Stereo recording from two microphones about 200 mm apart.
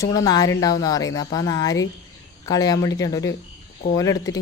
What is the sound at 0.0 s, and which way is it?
Speech, 15° left (ahead or behind).